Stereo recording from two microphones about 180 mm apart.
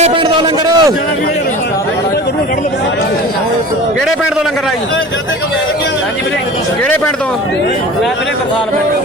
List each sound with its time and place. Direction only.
0.0 s a man's voice: 25° right (ahead or behind)